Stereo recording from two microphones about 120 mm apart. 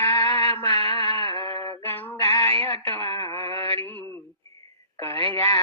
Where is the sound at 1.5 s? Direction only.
25° left (ahead or behind).